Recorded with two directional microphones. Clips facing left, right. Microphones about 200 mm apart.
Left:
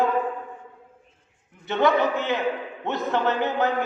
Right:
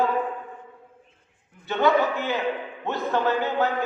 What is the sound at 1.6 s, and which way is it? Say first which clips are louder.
A man's voice: even; 20° left (ahead or behind).